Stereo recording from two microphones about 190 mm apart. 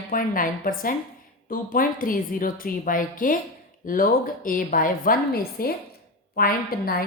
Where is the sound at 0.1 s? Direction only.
45° left (ahead or behind).